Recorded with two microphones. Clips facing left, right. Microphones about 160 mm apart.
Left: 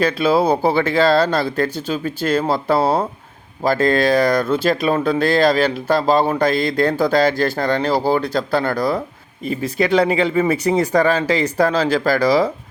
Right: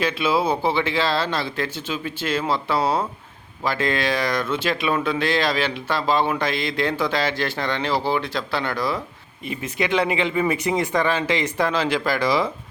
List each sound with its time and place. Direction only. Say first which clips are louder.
0.0 s speech: left 5 dB; 40° left (ahead or behind)